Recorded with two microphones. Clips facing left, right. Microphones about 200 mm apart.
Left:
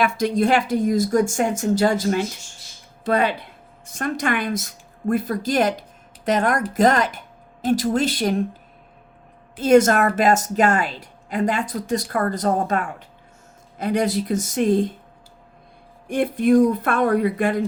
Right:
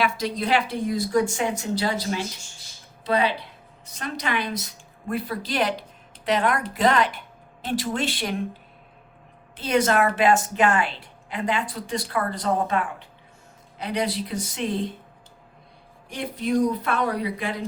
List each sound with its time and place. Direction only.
0.0 s a woman's voice: 50° left (ahead or behind)
9.6 s a woman's voice: 45° left (ahead or behind)
16.0 s a woman's voice: 55° left (ahead or behind)